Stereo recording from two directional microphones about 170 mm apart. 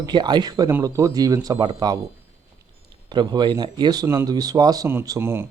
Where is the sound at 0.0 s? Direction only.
25° right (ahead or behind).